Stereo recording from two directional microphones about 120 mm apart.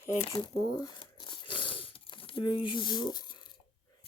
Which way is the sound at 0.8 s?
40° left (ahead or behind).